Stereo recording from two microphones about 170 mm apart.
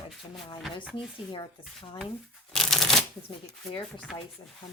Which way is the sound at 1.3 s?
25° left (ahead or behind).